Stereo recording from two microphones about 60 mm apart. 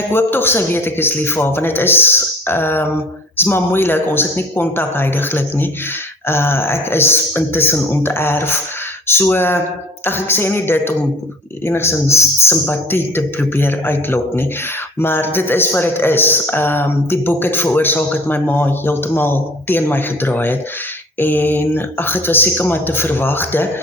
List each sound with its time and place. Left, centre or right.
0.1 s speech: left